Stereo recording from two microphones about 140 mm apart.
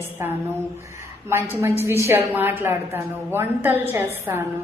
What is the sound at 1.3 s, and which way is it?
A woman's voice, 15° right (ahead or behind).